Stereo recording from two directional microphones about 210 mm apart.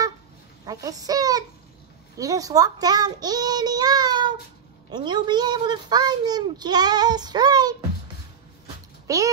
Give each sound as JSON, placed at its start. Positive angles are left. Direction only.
{"t": 0.7, "sound": "a child's voice", "side_deg": -15}
{"t": 9.0, "sound": "a child's voice", "side_deg": -15}